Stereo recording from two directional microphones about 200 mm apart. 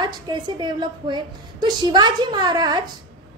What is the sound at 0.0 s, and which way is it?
A woman's voice, 20° right (ahead or behind).